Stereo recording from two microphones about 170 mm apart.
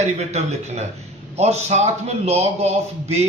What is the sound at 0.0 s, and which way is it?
A man's voice, 40° right (ahead or behind).